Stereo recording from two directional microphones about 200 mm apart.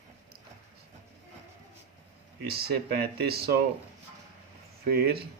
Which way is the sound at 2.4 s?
50° right (ahead or behind).